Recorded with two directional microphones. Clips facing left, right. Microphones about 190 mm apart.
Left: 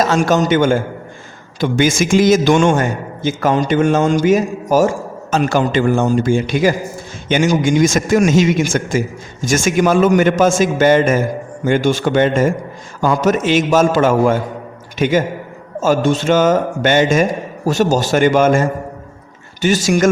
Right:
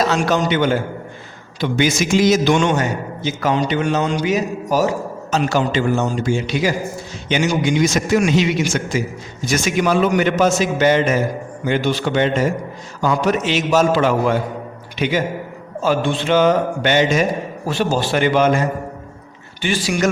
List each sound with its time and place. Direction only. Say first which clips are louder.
0.0 s a man's voice: left 3 dB; 45° left (ahead or behind)